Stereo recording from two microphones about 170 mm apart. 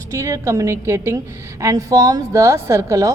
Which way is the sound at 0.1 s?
15° right (ahead or behind).